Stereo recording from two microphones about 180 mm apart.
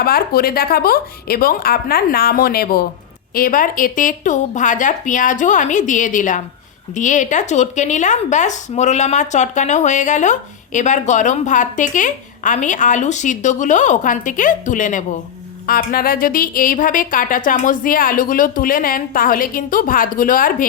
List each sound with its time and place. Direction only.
0.0 s speech: 55° left (ahead or behind)